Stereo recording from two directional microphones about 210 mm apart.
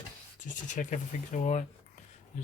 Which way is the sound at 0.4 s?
40° left (ahead or behind).